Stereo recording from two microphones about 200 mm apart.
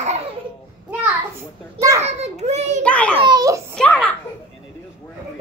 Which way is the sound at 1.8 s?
15° right (ahead or behind).